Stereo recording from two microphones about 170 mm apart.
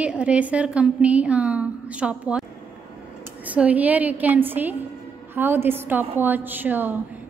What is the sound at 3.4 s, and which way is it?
A woman's voice, 10° right (ahead or behind).